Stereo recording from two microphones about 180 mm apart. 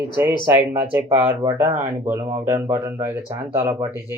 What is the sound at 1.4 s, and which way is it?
Speech, 20° right (ahead or behind).